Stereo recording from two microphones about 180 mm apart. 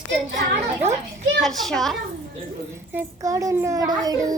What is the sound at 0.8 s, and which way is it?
Speech, 35° right (ahead or behind).